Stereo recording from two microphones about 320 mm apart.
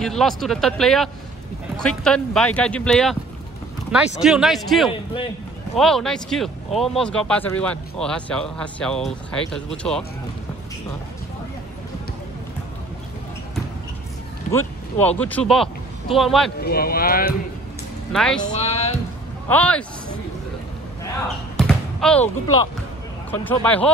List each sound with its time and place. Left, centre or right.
0.0 s speech: centre
4.2 s speech: centre
15.0 s speech: centre
16.6 s speech: left
18.1 s speech: centre
18.4 s speech: centre
19.5 s speech: centre
21.5 s basketball bounce: centre
23.3 s speech: centre